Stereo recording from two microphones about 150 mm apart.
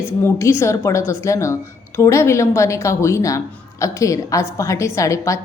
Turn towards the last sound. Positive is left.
turn(degrees=20)  # may be behind; listen again after turning